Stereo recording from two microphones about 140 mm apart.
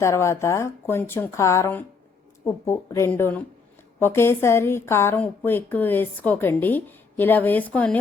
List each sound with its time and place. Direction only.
0.0 s a woman's voice: 20° left (ahead or behind)